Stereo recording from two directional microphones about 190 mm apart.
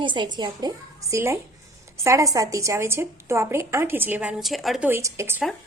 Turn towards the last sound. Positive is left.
turn(degrees=-15)  # may be behind; listen again after turning